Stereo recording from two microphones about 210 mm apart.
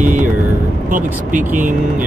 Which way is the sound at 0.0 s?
40° right (ahead or behind).